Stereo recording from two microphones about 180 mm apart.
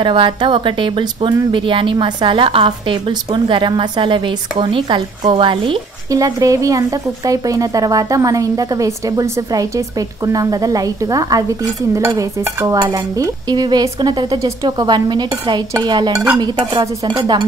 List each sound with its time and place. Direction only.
0.0 s speech: 25° right (ahead or behind)